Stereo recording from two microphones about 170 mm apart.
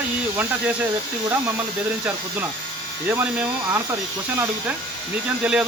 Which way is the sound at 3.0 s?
10° right (ahead or behind).